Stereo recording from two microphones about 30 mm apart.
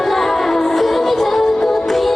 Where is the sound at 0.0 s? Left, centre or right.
Centre.